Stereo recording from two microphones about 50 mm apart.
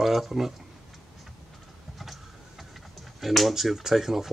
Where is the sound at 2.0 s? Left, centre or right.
Centre.